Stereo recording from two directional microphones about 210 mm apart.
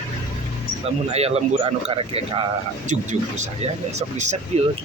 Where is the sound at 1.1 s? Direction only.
30° right (ahead or behind).